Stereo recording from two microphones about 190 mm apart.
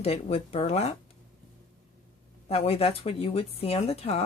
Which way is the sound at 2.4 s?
35° left (ahead or behind).